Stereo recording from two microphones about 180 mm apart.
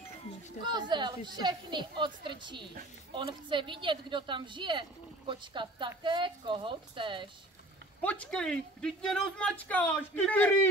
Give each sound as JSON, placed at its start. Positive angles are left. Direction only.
{"t": 0.6, "sound": "a woman's voice", "side_deg": -25}
{"t": 8.0, "sound": "speech", "side_deg": 5}